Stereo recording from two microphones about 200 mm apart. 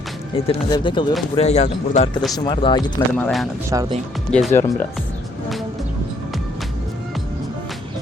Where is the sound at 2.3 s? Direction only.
20° left (ahead or behind).